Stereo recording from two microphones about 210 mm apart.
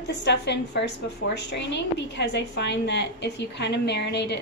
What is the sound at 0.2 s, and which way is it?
A woman's voice, 55° left (ahead or behind).